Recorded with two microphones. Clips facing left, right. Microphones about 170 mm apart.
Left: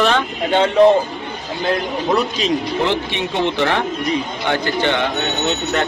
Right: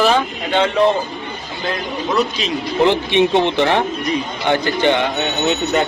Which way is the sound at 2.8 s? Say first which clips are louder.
Right 6 dB; 15° right (ahead or behind).